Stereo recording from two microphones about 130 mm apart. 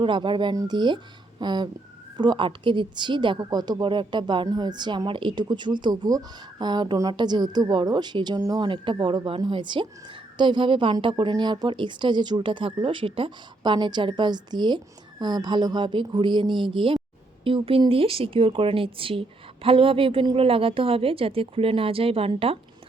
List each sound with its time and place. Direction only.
0.0 s a woman's voice: 40° right (ahead or behind)